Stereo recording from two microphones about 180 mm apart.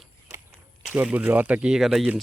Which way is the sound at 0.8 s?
10° right (ahead or behind).